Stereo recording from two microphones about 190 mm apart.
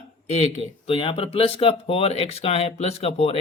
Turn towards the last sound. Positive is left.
turn(degrees=35)  # may be behind; listen again after turning